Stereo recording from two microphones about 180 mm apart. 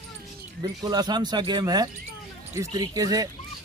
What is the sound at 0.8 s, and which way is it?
Speech, 25° right (ahead or behind).